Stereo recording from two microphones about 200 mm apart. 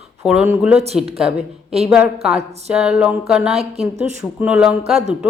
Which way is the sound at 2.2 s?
5° right (ahead or behind).